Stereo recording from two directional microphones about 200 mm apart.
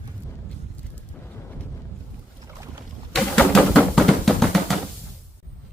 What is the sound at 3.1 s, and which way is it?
Drum, centre (ahead or behind).